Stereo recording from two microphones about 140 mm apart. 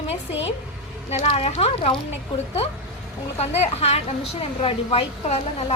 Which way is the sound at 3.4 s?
50° left (ahead or behind).